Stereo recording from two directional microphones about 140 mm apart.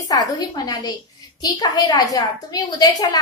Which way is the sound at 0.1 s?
30° left (ahead or behind).